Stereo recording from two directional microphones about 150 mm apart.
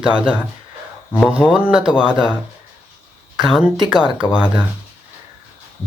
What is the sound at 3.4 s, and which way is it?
Speech, 5° right (ahead or behind).